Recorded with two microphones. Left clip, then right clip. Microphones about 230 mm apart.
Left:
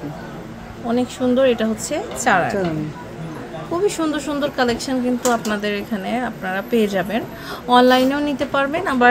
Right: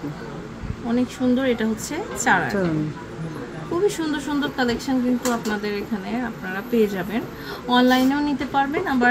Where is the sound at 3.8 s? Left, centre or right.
Centre.